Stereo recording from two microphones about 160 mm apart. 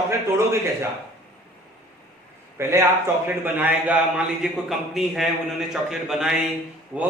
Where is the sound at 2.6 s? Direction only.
15° right (ahead or behind).